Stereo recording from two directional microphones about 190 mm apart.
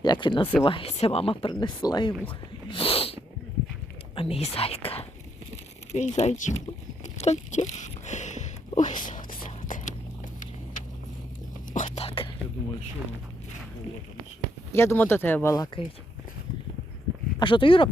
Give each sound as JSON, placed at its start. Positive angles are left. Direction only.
{"t": 0.0, "sound": "speech", "side_deg": 25}
{"t": 2.6, "sound": "sneeze", "side_deg": 25}
{"t": 4.1, "sound": "speech", "side_deg": 30}
{"t": 7.0, "sound": "a sound", "side_deg": 35}
{"t": 11.7, "sound": "whispering", "side_deg": 35}
{"t": 14.7, "sound": "speech", "side_deg": 15}
{"t": 17.4, "sound": "speech", "side_deg": 25}